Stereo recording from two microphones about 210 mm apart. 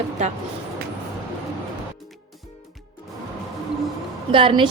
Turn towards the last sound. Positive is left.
turn(degrees=-25)  # may be behind; listen again after turning